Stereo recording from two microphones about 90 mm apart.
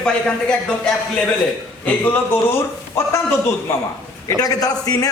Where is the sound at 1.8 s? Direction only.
20° left (ahead or behind).